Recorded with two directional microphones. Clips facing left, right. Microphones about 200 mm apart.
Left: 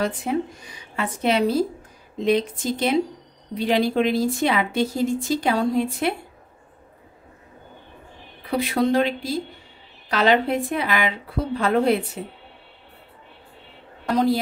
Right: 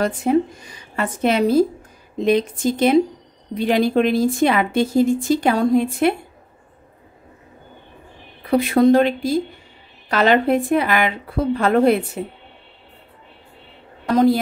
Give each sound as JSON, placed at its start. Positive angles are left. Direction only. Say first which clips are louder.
{"t": 0.0, "sound": "a woman's voice", "louder": "right 6 dB", "side_deg": -45}
{"t": 8.5, "sound": "a woman's voice", "louder": "right 7 dB", "side_deg": -50}
{"t": 14.1, "sound": "a woman's voice", "louder": "right 5 dB", "side_deg": -50}